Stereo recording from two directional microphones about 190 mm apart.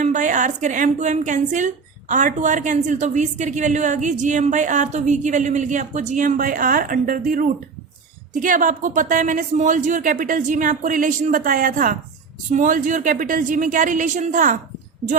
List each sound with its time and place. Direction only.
0.0 s a woman's voice: 40° right (ahead or behind)